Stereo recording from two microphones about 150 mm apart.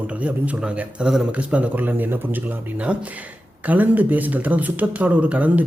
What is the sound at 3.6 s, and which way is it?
Speech, 10° right (ahead or behind).